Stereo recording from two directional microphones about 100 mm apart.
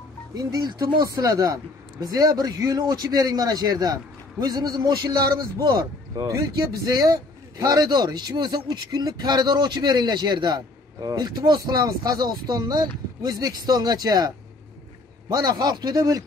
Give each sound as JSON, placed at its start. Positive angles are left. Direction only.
{"t": 0.3, "sound": "speech", "side_deg": -40}
{"t": 15.3, "sound": "speech", "side_deg": -40}